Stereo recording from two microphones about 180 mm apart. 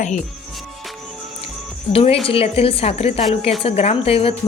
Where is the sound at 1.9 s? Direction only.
30° left (ahead or behind).